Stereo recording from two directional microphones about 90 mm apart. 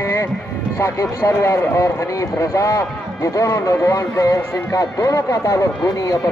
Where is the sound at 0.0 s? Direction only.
30° left (ahead or behind).